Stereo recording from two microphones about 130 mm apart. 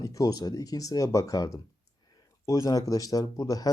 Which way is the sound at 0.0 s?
30° left (ahead or behind).